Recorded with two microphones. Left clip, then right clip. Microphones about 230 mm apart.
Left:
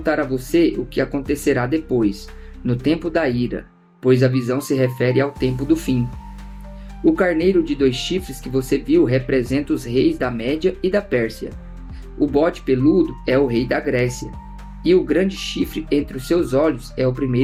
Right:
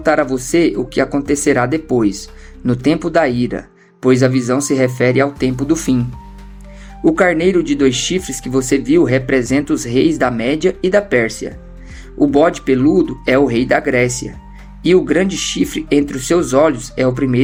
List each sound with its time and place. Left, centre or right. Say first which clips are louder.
0.0 s speech: right 6 dB; right
7.0 s speech: right 4 dB; right